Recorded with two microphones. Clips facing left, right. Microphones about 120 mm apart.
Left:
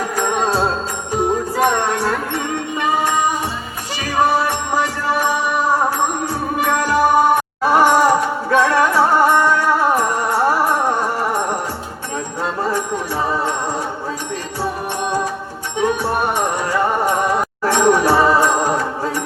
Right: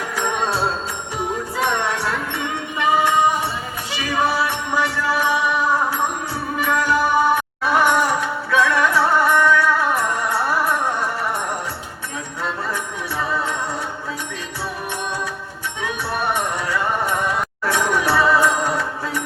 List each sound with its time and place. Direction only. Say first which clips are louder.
0.2 s music: left 3 dB; 40° left (ahead or behind)
4.1 s music: left 4 dB; 40° left (ahead or behind)
6.6 s music: left 3 dB; 40° left (ahead or behind)
9.2 s music: left 2 dB; 30° left (ahead or behind)
12.4 s music: left 5 dB; 40° left (ahead or behind)
15.8 s music: left 7 dB; 40° left (ahead or behind)